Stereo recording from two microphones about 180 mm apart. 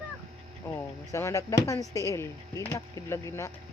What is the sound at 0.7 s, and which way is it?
Speech, 15° left (ahead or behind).